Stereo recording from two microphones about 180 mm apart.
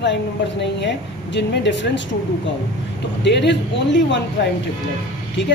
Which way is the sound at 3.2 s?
75° left (ahead or behind).